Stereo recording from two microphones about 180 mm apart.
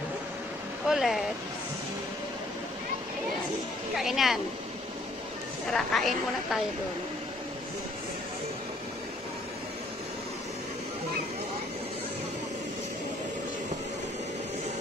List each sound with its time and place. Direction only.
0.8 s a woman's voice: centre (ahead or behind)
3.9 s a woman's voice: centre (ahead or behind)
5.7 s a woman's voice: centre (ahead or behind)